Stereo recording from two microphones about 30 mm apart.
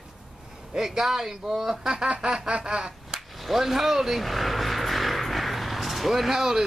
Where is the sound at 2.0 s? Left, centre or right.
Right.